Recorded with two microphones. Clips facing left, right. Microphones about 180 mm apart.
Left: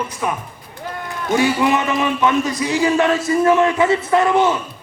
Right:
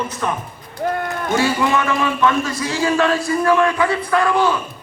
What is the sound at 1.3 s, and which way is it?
A man's voice, 20° left (ahead or behind).